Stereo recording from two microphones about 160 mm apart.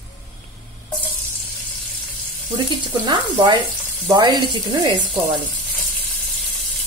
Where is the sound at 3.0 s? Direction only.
25° right (ahead or behind).